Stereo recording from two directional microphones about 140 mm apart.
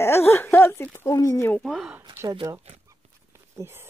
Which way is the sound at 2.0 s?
30° right (ahead or behind).